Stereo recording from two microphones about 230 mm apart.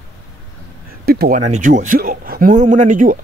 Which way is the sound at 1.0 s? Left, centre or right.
Right.